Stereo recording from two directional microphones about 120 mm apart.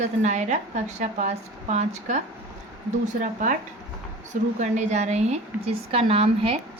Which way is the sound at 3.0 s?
90° right.